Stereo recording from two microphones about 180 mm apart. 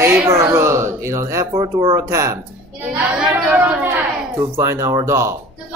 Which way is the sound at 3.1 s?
5° right (ahead or behind).